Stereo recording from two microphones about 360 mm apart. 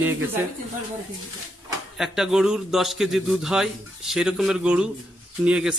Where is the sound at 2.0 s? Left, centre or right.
Centre.